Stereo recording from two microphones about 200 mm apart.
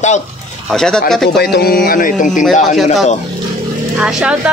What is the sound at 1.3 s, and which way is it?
Speech, 55° left (ahead or behind).